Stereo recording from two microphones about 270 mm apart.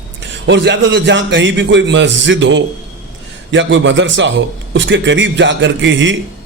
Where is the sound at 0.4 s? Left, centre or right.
Right.